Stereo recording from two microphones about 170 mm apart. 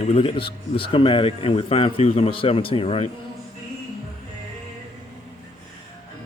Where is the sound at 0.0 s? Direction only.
35° left (ahead or behind).